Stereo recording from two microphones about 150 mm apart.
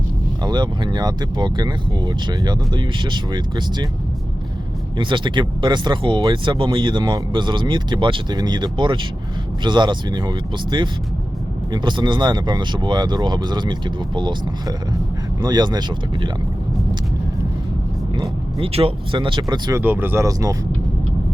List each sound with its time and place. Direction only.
0.4 s speech: 30° right (ahead or behind)
4.9 s speech: 30° right (ahead or behind)
18.2 s speech: 40° right (ahead or behind)
19.8 s speech: 15° right (ahead or behind)